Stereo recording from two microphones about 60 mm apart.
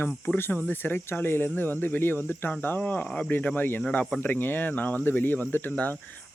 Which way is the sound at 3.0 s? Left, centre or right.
Centre.